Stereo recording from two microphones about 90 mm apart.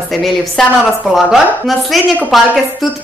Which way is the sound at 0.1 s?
Centre (ahead or behind).